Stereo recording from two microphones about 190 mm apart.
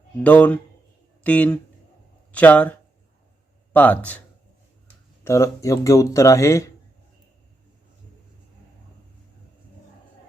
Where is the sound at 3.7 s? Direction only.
10° left (ahead or behind).